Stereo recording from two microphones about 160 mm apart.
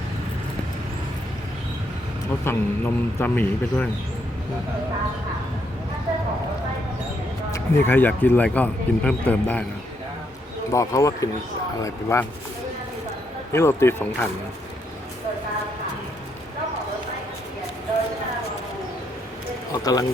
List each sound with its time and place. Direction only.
2.4 s a man's voice: 15° left (ahead or behind)
7.5 s a man's voice: 10° left (ahead or behind)
10.7 s speech: 20° left (ahead or behind)
13.5 s a man's voice: 15° left (ahead or behind)
19.7 s speech: 25° left (ahead or behind)